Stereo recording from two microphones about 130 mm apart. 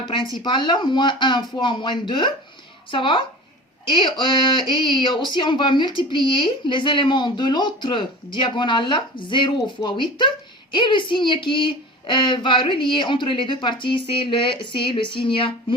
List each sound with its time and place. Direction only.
0.1 s speech: 35° left (ahead or behind)